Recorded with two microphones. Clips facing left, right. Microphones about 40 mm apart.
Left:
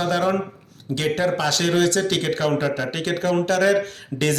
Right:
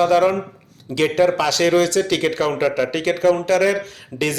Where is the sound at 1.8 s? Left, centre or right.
Left.